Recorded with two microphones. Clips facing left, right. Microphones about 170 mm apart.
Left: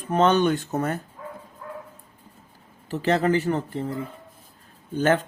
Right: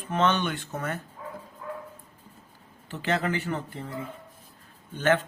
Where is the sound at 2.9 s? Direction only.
35° left (ahead or behind).